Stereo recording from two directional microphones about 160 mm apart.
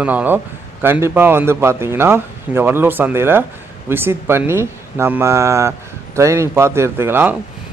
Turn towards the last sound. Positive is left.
turn(degrees=-15)  # may be behind; listen again after turning